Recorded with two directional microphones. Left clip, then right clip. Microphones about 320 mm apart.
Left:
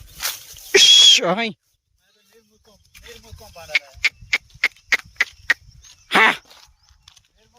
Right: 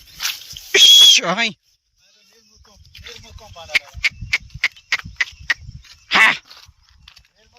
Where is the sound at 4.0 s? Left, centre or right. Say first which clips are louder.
Right 1 dB; centre.